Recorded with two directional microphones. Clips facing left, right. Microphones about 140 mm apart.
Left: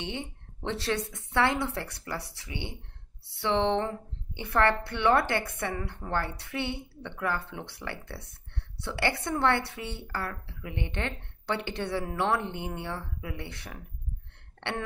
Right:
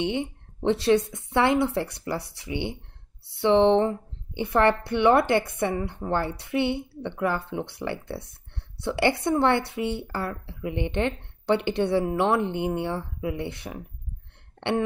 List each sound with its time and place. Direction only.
0.0 s a woman's voice: 15° right (ahead or behind)
14.6 s throat clearing: 20° right (ahead or behind)